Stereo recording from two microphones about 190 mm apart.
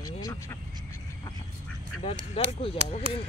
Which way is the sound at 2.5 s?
30° left (ahead or behind).